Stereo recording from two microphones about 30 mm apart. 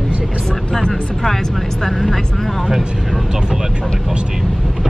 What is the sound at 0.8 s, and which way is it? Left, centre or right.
Speech, left.